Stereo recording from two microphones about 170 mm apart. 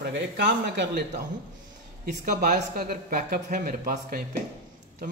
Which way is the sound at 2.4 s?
55° right (ahead or behind).